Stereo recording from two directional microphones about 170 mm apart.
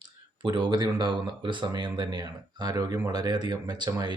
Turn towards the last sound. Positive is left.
turn(degrees=-25)  # may be behind; listen again after turning